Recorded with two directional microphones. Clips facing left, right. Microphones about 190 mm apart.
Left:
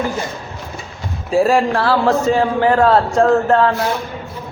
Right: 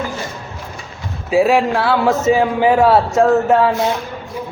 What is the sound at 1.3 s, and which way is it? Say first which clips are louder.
Speech: right 1 dB; centre (ahead or behind).